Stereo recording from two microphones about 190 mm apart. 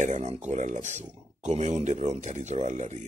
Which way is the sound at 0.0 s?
40° right (ahead or behind).